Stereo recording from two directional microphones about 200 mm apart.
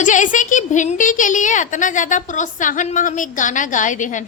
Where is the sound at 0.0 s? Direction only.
40° left (ahead or behind).